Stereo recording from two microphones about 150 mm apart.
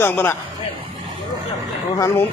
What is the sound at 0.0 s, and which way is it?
Speech, 15° left (ahead or behind).